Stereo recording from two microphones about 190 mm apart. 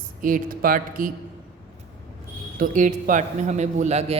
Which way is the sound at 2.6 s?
45° right (ahead or behind).